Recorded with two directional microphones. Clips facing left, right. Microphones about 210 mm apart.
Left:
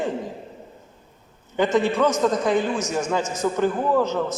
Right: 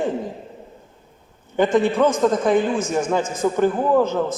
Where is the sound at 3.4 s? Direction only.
30° right (ahead or behind).